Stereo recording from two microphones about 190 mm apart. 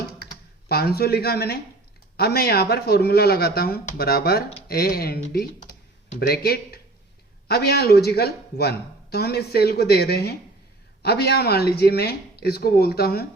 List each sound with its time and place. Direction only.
0.7 s speech: 55° left (ahead or behind)